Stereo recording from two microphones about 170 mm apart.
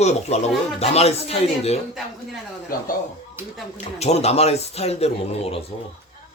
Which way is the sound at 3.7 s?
40° left (ahead or behind).